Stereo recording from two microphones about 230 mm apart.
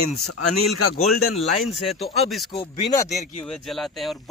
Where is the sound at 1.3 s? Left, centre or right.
Centre.